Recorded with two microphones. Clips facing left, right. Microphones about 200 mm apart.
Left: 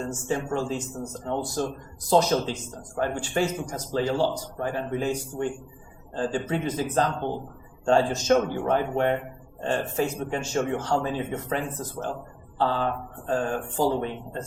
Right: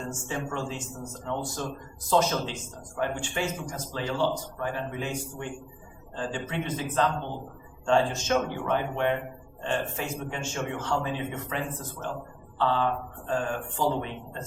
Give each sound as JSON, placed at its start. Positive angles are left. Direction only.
{"t": 0.1, "sound": "a man's voice", "side_deg": 40}
{"t": 7.9, "sound": "a man's voice", "side_deg": 40}